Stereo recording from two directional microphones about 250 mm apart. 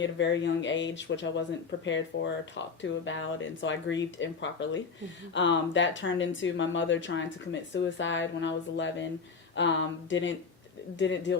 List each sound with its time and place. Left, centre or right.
0.0 s speech: left